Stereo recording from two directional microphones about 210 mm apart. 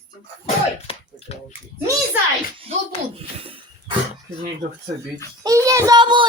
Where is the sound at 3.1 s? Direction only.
25° right (ahead or behind).